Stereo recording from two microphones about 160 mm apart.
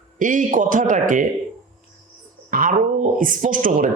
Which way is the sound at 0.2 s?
55° right (ahead or behind).